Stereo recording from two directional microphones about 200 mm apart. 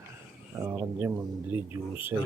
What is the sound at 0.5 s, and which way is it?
Speech, 15° right (ahead or behind).